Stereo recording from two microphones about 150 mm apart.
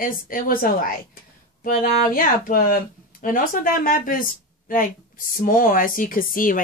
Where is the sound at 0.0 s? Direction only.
70° left (ahead or behind).